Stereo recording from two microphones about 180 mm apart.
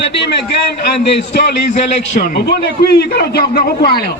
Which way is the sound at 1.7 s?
40° left (ahead or behind).